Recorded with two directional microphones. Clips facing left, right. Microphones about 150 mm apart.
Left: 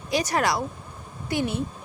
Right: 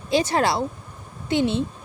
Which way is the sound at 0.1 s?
25° right (ahead or behind).